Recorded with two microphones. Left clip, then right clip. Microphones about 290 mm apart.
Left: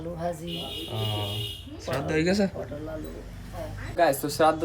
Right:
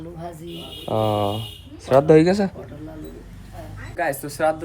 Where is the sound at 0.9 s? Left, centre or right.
Left.